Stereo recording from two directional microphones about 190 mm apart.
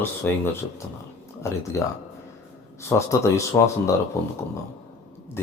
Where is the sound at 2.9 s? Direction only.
15° left (ahead or behind).